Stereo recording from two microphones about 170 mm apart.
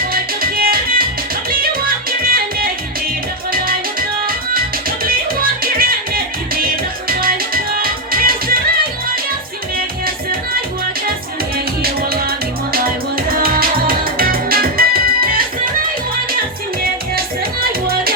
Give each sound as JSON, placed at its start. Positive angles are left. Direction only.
{"t": 0.1, "sound": "music", "side_deg": -60}
{"t": 5.0, "sound": "music", "side_deg": -60}
{"t": 11.5, "sound": "music", "side_deg": -60}
{"t": 17.2, "sound": "music", "side_deg": -60}